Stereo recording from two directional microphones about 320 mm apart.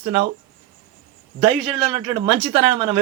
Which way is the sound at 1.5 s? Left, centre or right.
Centre.